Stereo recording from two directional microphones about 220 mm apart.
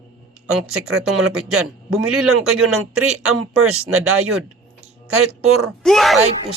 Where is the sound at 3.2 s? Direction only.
75° right (ahead or behind).